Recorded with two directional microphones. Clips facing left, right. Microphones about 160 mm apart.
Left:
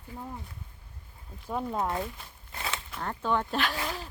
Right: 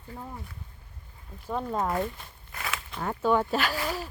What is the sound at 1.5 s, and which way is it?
Speech, 5° left (ahead or behind).